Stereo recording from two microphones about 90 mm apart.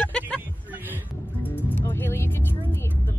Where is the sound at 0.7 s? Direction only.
20° right (ahead or behind).